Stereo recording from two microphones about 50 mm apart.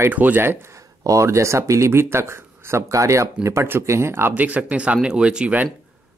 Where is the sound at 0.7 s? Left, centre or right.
Right.